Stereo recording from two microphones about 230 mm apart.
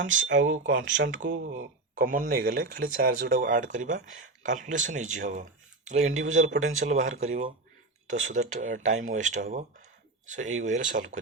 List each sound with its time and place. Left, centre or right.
0.0 s speech: right
2.0 s speech: right
6.1 s speech: right
6.7 s speech: right